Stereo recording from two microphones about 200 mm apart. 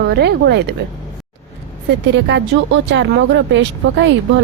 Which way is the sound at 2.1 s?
60° right (ahead or behind).